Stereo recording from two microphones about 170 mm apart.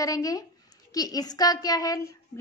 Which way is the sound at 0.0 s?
20° left (ahead or behind).